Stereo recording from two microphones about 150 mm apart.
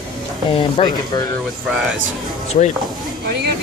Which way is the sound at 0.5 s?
30° left (ahead or behind).